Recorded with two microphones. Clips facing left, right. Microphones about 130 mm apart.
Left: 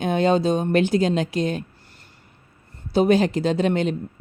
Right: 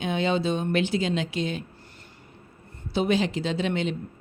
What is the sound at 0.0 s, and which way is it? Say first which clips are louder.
Speech: left 6 dB; 45° left (ahead or behind).